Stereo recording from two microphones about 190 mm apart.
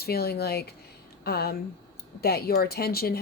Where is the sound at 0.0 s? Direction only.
55° left (ahead or behind).